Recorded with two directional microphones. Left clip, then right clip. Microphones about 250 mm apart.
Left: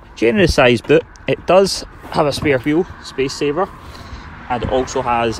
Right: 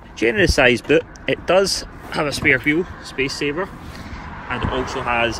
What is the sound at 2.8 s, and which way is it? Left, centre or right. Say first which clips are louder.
Speech: left 4 dB; right.